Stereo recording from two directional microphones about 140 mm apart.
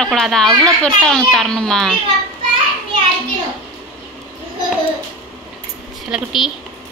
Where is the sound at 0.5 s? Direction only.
30° right (ahead or behind).